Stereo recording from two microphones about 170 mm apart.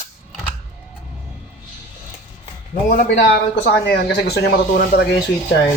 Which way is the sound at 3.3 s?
75° left (ahead or behind).